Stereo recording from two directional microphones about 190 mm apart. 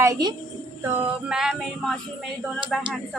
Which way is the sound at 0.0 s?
20° right (ahead or behind).